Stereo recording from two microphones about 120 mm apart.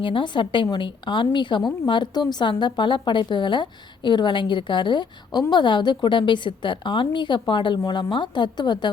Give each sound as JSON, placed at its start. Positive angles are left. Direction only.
{"t": 0.0, "sound": "a woman's voice", "side_deg": 45}